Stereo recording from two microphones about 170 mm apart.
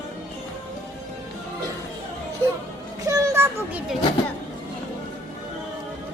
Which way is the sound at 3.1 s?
20° right (ahead or behind).